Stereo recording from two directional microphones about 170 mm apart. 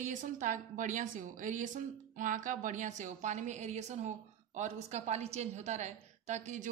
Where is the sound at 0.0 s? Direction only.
50° right (ahead or behind).